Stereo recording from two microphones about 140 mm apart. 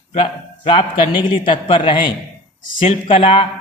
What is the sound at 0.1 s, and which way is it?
A man's voice, 40° left (ahead or behind).